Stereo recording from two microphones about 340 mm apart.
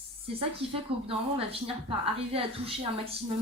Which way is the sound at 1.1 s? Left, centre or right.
Centre.